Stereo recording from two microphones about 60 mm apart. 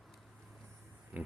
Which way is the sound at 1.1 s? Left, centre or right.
Right.